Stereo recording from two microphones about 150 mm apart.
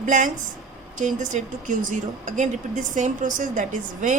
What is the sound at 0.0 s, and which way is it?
A woman's voice, 55° right (ahead or behind).